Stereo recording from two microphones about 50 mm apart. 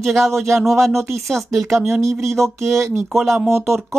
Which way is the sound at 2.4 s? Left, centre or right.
Right.